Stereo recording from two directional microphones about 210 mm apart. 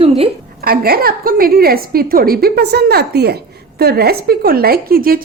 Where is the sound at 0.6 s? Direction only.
45° right (ahead or behind).